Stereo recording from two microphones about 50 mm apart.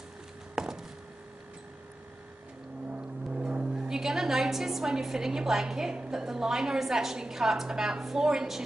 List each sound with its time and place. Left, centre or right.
0.6 s a sound: centre
2.9 s vehicle: right
3.9 s a woman's voice: centre